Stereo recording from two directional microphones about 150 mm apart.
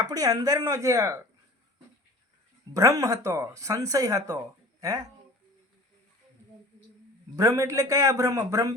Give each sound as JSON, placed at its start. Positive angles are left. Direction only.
{"t": 0.0, "sound": "speech", "side_deg": -25}
{"t": 2.7, "sound": "speech", "side_deg": -20}
{"t": 7.3, "sound": "speech", "side_deg": -20}